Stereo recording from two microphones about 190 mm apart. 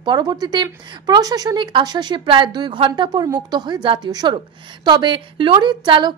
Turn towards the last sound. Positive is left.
turn(degrees=-25)  # may be behind; listen again after turning